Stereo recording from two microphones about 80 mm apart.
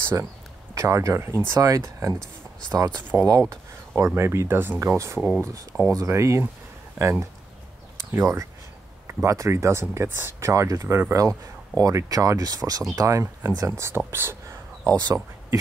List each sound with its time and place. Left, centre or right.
0.7 s speech: right
3.3 s speech: right
3.9 s speech: right
4.9 s speech: right
10.5 s speech: right
11.1 s speech: right
14.9 s speech: right